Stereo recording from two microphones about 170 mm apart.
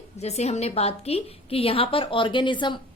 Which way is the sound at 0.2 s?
40° left (ahead or behind).